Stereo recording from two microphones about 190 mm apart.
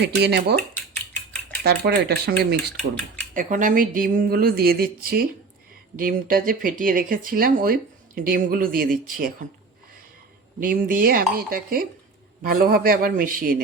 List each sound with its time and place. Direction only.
0.0 s speech: 60° right (ahead or behind)
0.9 s a sound: 5° left (ahead or behind)
1.6 s speech: 55° right (ahead or behind)
3.3 s speech: 45° right (ahead or behind)
10.6 s speech: 50° right (ahead or behind)